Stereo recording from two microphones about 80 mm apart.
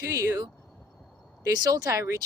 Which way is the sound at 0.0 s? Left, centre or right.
Right.